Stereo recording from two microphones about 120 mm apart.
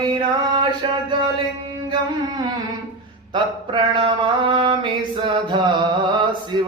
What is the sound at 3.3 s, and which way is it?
Mantra, 40° right (ahead or behind).